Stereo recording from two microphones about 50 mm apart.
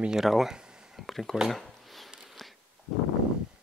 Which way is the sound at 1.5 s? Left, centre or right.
Centre.